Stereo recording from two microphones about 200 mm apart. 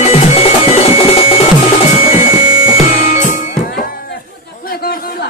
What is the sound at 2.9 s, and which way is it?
Music, 50° left (ahead or behind).